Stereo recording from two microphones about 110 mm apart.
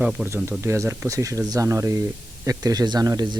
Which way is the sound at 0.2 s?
5° left (ahead or behind).